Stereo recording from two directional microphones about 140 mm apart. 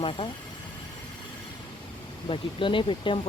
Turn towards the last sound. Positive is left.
turn(degrees=35)  # may be behind; listen again after turning